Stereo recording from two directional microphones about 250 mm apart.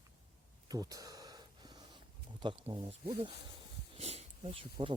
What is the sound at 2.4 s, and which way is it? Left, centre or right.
Speech, centre.